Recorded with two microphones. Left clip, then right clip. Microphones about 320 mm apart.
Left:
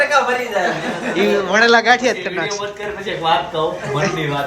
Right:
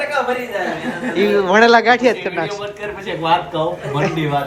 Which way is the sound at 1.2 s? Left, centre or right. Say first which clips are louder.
Right 2 dB; centre.